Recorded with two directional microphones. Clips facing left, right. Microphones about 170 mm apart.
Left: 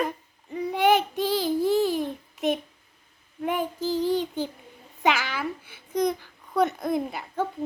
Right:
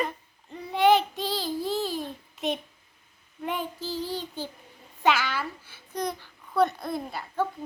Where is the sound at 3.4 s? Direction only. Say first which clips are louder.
Left 5 dB; 10° left (ahead or behind).